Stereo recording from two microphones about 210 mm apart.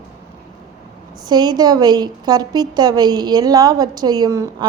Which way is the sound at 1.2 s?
20° right (ahead or behind).